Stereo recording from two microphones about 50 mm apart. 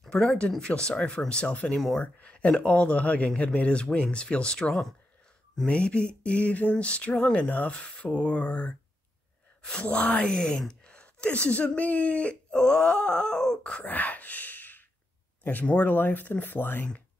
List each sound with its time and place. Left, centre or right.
0.1 s speech: centre
1.7 s speech: centre
2.2 s a sound: left
2.6 s speech: left
10.2 s speech: centre
13.8 s sigh: left
15.6 s speech: left
15.9 s speech: left